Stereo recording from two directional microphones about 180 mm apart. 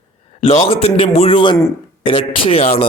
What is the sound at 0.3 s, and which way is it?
A man's voice, 35° left (ahead or behind).